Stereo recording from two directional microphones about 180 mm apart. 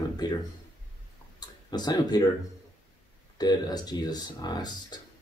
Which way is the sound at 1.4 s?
25° left (ahead or behind).